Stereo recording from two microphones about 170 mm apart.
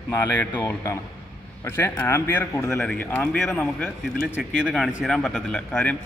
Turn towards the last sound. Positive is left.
turn(degrees=5)  # may be behind; listen again after turning